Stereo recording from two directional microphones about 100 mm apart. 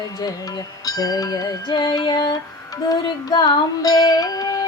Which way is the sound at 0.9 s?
40° left (ahead or behind).